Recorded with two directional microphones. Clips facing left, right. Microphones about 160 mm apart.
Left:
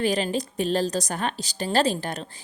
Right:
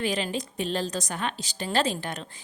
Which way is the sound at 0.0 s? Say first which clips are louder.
Left 4 dB; 40° left (ahead or behind).